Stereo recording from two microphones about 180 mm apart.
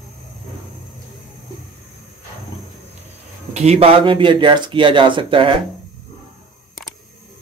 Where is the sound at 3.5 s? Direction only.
35° right (ahead or behind).